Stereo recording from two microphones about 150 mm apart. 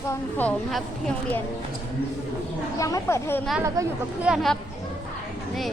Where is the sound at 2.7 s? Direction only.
20° left (ahead or behind).